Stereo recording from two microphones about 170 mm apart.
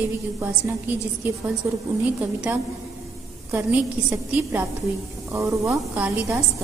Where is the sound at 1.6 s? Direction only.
10° right (ahead or behind).